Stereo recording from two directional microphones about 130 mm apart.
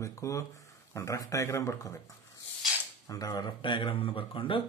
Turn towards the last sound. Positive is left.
turn(degrees=40)  # may be behind; listen again after turning